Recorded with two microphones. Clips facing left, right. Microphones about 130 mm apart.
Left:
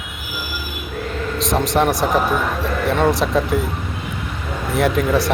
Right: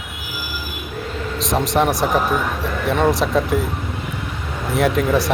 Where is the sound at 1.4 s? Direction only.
Centre (ahead or behind).